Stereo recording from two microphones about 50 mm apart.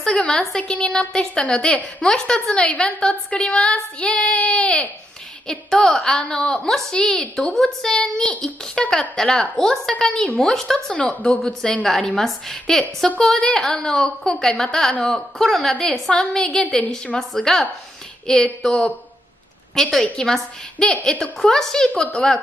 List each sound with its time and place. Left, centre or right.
0.0 s a woman's voice: centre
2.5 s female singing: left
5.5 s a woman's voice: centre
11.0 s female singing: left
12.2 s a woman's voice: centre
21.8 s female singing: left